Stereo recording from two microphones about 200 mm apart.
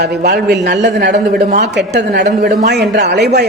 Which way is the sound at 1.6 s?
60° right (ahead or behind).